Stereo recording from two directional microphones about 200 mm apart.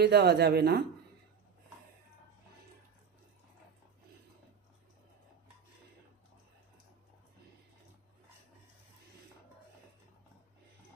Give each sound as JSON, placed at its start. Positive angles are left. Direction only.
{"t": 0.0, "sound": "speech", "side_deg": -55}